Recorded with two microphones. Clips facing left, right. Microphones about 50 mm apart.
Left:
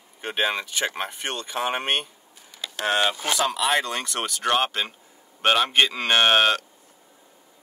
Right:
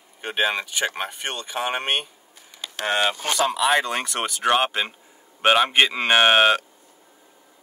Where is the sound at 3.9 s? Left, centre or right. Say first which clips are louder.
Right 3 dB; right.